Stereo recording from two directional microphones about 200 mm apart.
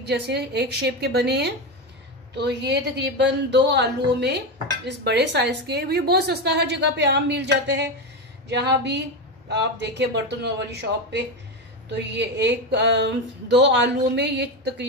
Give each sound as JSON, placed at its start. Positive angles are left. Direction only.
{"t": 0.0, "sound": "a woman's voice", "side_deg": -55}